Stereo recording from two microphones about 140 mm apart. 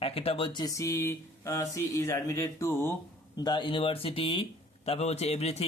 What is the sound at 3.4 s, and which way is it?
A man's voice, 35° left (ahead or behind).